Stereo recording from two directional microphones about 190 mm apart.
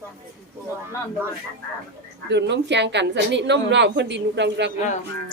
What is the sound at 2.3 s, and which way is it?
A woman's voice, 65° right (ahead or behind).